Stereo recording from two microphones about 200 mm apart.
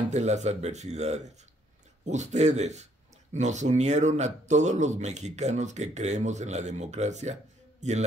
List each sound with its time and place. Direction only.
0.1 s speech: 35° right (ahead or behind)